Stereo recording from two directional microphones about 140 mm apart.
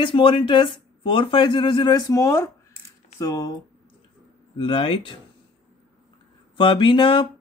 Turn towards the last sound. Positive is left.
turn(degrees=35)  # may be behind; listen again after turning